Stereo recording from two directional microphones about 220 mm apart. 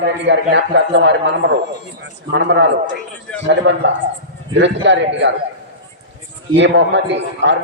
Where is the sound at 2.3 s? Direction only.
55° right (ahead or behind).